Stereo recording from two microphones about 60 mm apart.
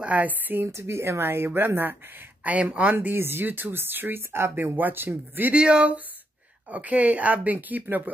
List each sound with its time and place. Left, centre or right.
0.0 s speech: right
0.7 s speech: right
2.4 s speech: right
3.2 s speech: right
5.5 s speech: centre